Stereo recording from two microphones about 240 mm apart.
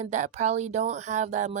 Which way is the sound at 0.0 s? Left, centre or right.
Right.